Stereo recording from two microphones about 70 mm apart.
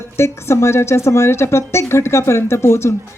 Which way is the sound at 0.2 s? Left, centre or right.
Left.